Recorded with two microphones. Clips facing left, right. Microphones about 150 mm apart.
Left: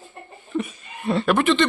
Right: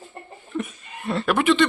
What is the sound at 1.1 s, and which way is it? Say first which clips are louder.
Speech: left 1 dB; centre (ahead or behind).